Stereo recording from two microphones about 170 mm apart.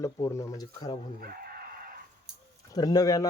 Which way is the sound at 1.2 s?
60° right (ahead or behind).